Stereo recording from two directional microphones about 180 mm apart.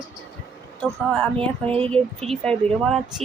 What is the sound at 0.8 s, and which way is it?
Speech, 5° left (ahead or behind).